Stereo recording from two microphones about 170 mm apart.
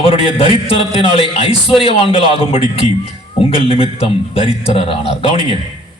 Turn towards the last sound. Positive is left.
turn(degrees=35)  # may be behind; listen again after turning